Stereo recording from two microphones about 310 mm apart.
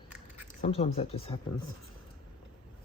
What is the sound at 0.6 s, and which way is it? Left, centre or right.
Speech, centre.